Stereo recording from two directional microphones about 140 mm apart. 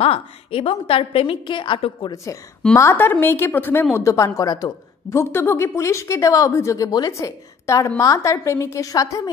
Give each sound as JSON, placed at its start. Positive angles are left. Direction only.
{"t": 0.0, "sound": "a woman's voice", "side_deg": 45}
{"t": 2.8, "sound": "a woman's voice", "side_deg": 15}